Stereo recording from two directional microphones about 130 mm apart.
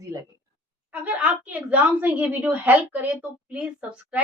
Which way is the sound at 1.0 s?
10° right (ahead or behind).